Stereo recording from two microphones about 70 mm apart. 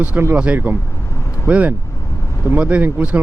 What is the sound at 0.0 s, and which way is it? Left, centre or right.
Speech, right.